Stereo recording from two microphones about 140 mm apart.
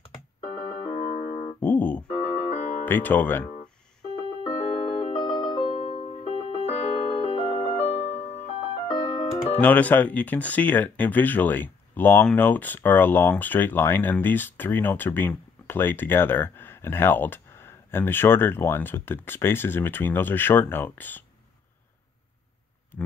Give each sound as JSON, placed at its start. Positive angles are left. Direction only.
{"t": 0.8, "sound": "music", "side_deg": 40}
{"t": 1.5, "sound": "music", "side_deg": 15}
{"t": 2.0, "sound": "music", "side_deg": 30}
{"t": 2.8, "sound": "speech", "side_deg": 15}
{"t": 4.5, "sound": "music", "side_deg": 45}
{"t": 6.2, "sound": "music", "side_deg": 45}
{"t": 8.9, "sound": "keyboard", "side_deg": 30}
{"t": 9.6, "sound": "speech", "side_deg": 10}